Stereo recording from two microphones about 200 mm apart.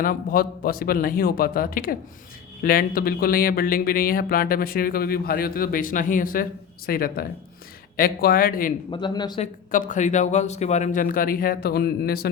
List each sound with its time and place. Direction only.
0.0 s speech: 45° left (ahead or behind)
8.9 s speech: 25° left (ahead or behind)
9.4 s speech: 40° left (ahead or behind)